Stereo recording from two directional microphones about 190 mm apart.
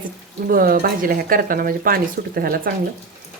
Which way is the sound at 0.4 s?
50° right (ahead or behind).